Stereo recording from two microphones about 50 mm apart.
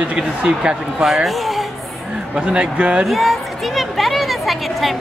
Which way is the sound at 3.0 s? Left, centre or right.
Centre.